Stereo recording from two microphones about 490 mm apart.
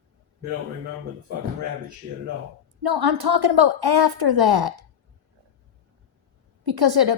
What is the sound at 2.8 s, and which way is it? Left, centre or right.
A woman's voice, right.